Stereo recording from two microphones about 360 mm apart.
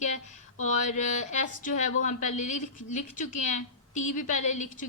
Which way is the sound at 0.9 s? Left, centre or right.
Centre.